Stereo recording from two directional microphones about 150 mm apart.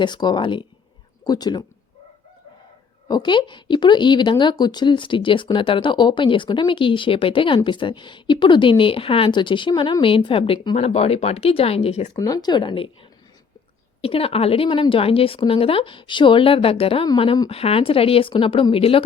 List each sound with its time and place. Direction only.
0.0 s speech: 30° left (ahead or behind)
3.1 s speech: 30° left (ahead or behind)
10.8 s speech: 45° left (ahead or behind)
12.1 s speech: 25° left (ahead or behind)
14.0 s speech: 40° left (ahead or behind)